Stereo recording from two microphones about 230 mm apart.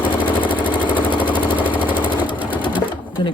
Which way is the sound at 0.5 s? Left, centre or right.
Centre.